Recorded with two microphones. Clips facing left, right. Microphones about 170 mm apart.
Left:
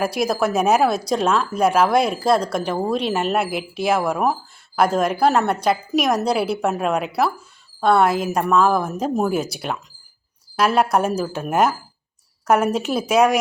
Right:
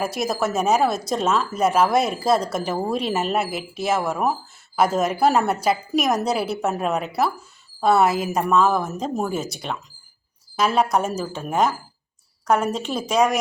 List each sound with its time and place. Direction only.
0.0 s speech: centre (ahead or behind)